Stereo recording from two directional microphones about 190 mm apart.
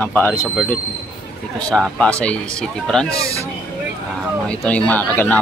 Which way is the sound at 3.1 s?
15° right (ahead or behind).